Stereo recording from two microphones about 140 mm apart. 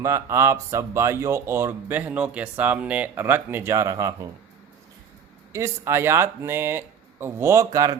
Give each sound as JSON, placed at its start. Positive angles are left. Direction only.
{"t": 0.0, "sound": "speech", "side_deg": -20}
{"t": 5.5, "sound": "speech", "side_deg": -20}